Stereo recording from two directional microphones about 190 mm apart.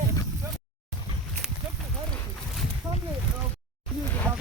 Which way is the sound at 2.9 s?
15° right (ahead or behind).